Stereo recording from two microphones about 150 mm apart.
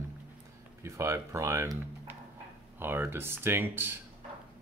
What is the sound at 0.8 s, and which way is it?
Speech, 20° right (ahead or behind).